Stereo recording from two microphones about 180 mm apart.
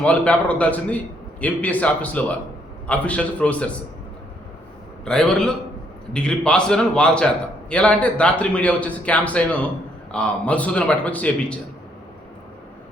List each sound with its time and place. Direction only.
0.0 s a man's voice: 5° left (ahead or behind)
5.0 s a man's voice: 5° left (ahead or behind)